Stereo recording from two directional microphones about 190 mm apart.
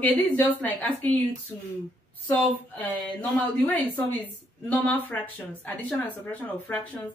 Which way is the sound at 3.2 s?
10° left (ahead or behind).